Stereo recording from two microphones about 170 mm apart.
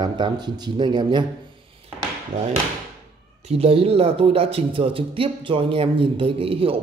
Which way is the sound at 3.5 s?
35° right (ahead or behind).